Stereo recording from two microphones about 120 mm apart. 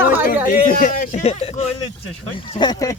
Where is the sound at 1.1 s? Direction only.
65° left (ahead or behind).